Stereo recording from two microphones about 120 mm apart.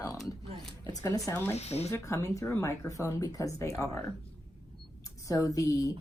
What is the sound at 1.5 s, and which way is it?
Speech, 65° left (ahead or behind).